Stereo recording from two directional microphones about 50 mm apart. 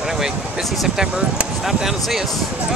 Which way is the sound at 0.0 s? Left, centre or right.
Centre.